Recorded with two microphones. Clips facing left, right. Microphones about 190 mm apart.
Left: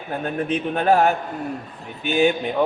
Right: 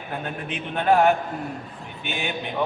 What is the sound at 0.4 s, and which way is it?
Speech, 40° left (ahead or behind).